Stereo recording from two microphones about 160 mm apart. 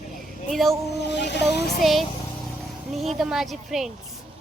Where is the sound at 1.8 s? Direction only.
Centre (ahead or behind).